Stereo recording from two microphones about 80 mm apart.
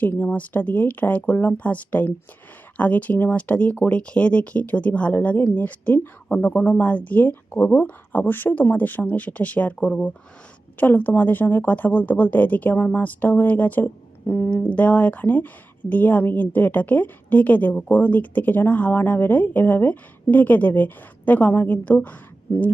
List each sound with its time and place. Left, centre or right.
0.0 s a woman's voice: left
14.5 s a woman's voice: centre